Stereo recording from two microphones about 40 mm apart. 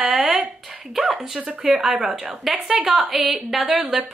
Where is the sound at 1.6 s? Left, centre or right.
Centre.